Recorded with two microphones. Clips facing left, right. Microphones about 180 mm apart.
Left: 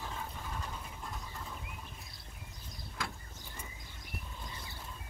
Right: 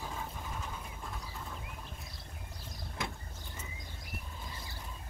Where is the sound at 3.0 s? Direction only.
20° right (ahead or behind).